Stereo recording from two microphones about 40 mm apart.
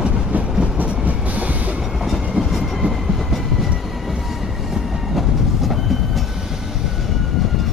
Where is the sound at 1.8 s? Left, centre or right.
Centre.